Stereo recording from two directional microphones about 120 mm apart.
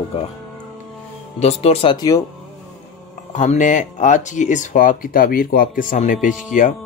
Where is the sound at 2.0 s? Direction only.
30° left (ahead or behind).